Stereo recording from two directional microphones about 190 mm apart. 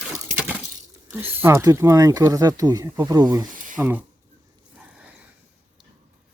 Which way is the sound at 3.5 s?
45° right (ahead or behind).